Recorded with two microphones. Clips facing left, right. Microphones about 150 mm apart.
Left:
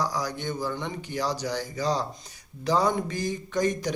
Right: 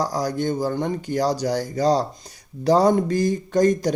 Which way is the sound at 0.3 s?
45° right (ahead or behind).